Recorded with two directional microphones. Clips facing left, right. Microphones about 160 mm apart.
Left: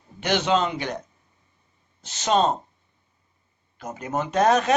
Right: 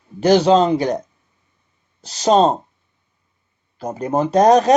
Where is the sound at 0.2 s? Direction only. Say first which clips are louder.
Right 10 dB; 35° right (ahead or behind).